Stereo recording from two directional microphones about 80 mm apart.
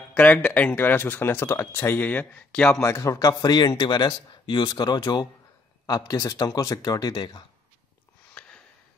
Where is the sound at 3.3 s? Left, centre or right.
Left.